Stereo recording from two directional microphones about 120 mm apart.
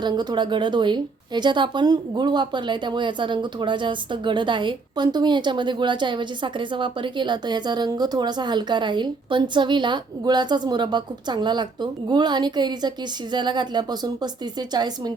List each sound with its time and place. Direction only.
0.0 s a woman's voice: 35° right (ahead or behind)